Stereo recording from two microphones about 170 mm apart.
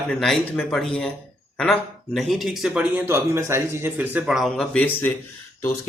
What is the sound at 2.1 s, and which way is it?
Speech, centre (ahead or behind).